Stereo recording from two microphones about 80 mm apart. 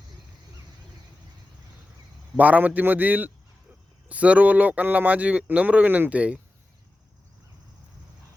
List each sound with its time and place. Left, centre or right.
2.4 s speech: centre